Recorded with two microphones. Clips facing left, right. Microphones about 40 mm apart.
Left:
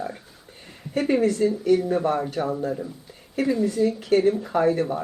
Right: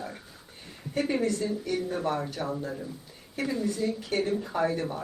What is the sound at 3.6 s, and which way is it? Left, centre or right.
Speech, left.